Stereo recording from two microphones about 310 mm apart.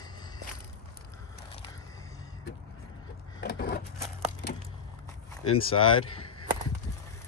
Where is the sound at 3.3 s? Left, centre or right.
Left.